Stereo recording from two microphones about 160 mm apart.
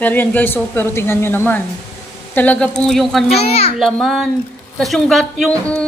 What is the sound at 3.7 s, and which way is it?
Speech, centre (ahead or behind).